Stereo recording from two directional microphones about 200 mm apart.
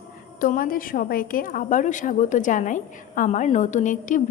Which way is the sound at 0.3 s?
45° left (ahead or behind).